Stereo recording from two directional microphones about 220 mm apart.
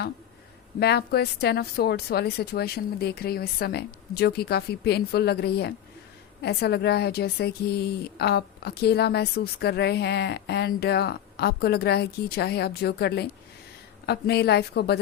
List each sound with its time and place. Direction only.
0.8 s a woman's voice: 45° left (ahead or behind)